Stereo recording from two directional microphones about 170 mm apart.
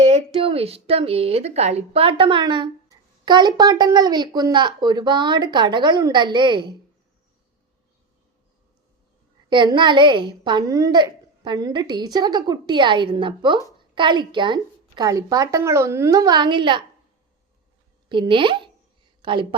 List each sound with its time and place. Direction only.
0.3 s a woman's voice: 35° right (ahead or behind)
9.5 s a woman's voice: 25° right (ahead or behind)
18.1 s a woman's voice: 30° right (ahead or behind)